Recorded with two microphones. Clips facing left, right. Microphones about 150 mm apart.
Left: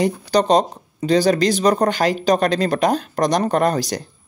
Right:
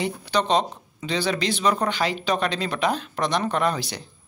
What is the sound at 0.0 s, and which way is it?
Speech, 40° left (ahead or behind).